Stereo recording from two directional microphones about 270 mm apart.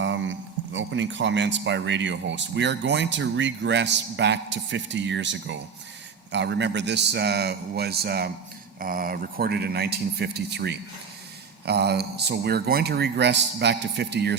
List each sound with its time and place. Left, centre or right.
0.0 s speech: right